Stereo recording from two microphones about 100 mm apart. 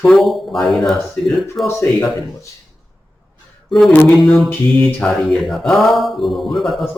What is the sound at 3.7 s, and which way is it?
Speech, centre (ahead or behind).